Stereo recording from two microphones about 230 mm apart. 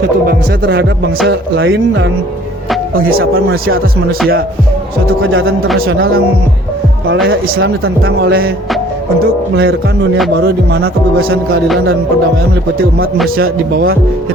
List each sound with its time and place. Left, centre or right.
0.6 s speech: right
3.1 s a man's voice: right
8.2 s a man's voice: right
9.6 s speech: right
13.2 s a man's voice: right